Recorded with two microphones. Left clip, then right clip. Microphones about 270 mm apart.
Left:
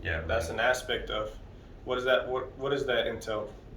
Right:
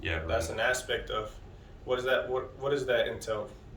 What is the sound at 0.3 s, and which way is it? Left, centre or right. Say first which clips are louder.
A man's voice: left 2 dB; centre.